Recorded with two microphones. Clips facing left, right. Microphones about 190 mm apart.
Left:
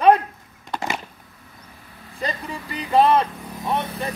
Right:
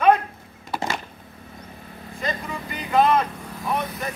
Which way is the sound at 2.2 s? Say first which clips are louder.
Even; 35° left (ahead or behind).